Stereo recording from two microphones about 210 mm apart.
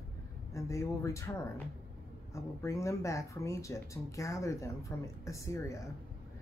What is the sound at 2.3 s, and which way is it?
Speech, 15° left (ahead or behind).